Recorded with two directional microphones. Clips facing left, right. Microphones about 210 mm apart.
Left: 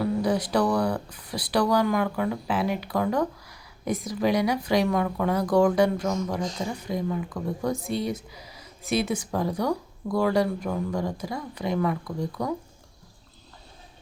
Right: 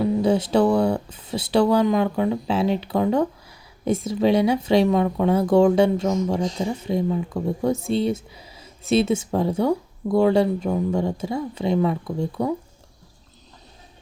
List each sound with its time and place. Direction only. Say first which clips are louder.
0.0 s speech: right 5 dB; 25° right (ahead or behind)